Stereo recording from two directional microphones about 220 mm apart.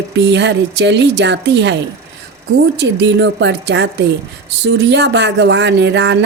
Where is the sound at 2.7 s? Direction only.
55° right (ahead or behind).